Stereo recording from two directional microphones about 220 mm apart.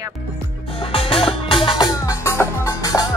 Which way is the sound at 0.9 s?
25° left (ahead or behind).